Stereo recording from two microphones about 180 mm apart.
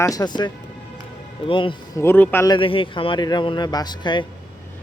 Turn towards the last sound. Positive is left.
turn(degrees=25)  # may be behind; listen again after turning